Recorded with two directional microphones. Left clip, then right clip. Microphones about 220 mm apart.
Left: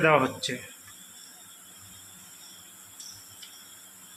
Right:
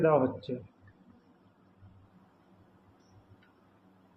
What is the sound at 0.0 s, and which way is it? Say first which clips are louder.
Speech: left 4 dB; 40° left (ahead or behind).